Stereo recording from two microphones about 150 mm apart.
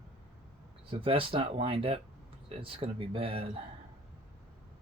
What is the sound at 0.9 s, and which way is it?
Speech, 35° right (ahead or behind).